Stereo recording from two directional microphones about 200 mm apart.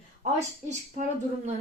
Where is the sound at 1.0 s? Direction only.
35° right (ahead or behind).